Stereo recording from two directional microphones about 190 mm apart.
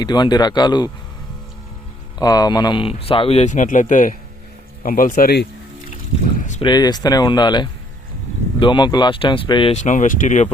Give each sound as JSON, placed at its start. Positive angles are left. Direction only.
{"t": 0.0, "sound": "speech", "side_deg": 20}
{"t": 2.1, "sound": "speech", "side_deg": 20}
{"t": 6.6, "sound": "speech", "side_deg": 20}
{"t": 9.7, "sound": "speech", "side_deg": 40}